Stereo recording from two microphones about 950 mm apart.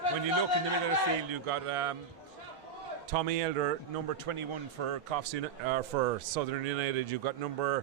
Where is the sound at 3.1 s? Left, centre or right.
Right.